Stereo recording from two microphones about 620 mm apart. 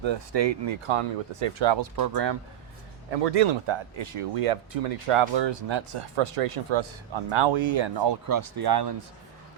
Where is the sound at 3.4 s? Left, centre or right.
Right.